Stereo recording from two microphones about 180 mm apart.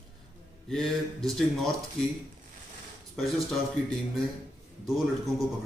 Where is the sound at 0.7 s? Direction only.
5° left (ahead or behind).